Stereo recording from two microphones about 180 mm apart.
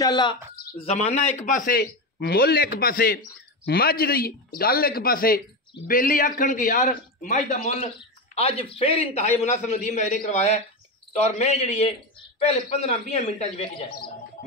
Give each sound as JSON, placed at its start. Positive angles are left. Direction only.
{"t": 0.0, "sound": "speech", "side_deg": 25}
{"t": 0.7, "sound": "a man's voice", "side_deg": 35}